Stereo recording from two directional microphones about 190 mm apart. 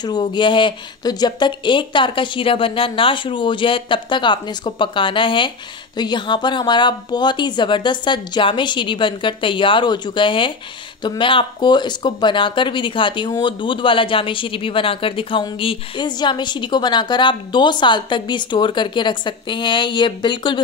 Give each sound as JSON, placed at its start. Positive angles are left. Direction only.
{"t": 0.0, "sound": "speech", "side_deg": 20}